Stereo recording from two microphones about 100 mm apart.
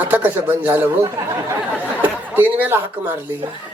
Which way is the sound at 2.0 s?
20° right (ahead or behind).